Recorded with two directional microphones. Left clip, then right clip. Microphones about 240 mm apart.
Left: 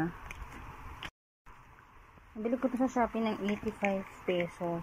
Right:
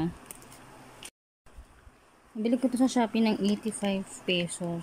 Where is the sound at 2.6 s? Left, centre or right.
Right.